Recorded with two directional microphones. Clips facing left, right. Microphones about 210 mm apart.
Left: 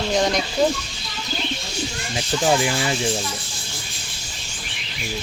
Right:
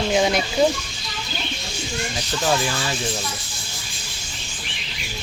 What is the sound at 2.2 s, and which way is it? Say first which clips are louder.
Speech: left 4 dB; 15° left (ahead or behind).